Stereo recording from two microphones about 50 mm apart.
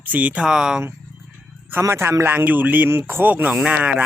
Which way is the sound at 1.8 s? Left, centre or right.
Right.